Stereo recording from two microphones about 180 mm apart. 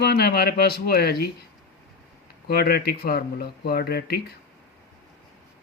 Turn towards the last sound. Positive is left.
turn(degrees=60)  # may be behind; listen again after turning